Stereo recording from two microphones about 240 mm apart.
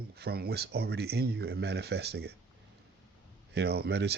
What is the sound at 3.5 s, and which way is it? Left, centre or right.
Speech, right.